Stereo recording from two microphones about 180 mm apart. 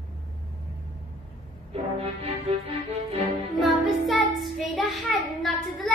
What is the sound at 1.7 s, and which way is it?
Music, 35° right (ahead or behind).